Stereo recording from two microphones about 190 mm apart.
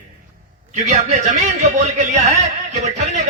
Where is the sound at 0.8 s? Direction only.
40° right (ahead or behind).